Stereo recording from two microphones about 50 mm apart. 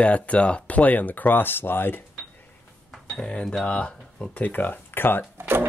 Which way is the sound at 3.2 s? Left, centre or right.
Centre.